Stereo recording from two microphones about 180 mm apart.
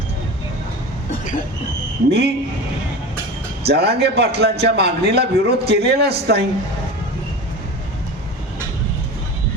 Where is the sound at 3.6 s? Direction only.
65° right (ahead or behind).